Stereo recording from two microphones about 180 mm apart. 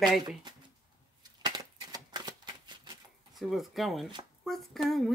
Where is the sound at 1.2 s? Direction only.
20° right (ahead or behind).